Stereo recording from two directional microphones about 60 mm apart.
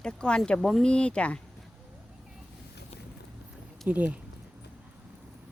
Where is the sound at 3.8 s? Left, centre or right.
Right.